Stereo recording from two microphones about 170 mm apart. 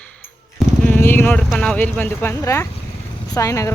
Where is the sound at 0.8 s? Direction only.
10° left (ahead or behind).